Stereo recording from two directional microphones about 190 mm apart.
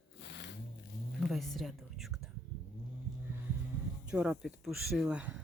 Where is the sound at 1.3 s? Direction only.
Centre (ahead or behind).